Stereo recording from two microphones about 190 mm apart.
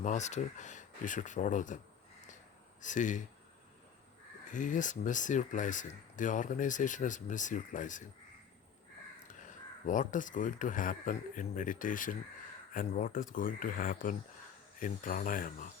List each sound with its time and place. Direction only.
0.0 s speech: 40° left (ahead or behind)
2.8 s speech: 40° left (ahead or behind)
4.5 s speech: 40° left (ahead or behind)
9.2 s speech: 40° left (ahead or behind)